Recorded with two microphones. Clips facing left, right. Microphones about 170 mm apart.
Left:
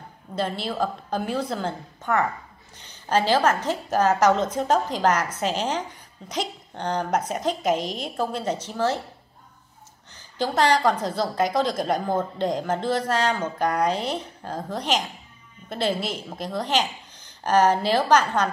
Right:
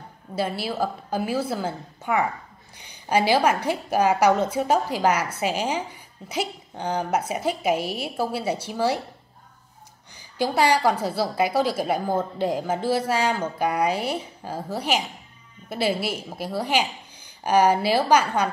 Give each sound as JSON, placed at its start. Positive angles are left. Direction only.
{"t": 0.4, "sound": "a woman's voice", "side_deg": -5}
{"t": 10.1, "sound": "a woman's voice", "side_deg": -10}